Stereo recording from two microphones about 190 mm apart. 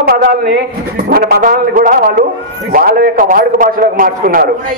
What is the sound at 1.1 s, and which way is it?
A man's voice, 50° right (ahead or behind).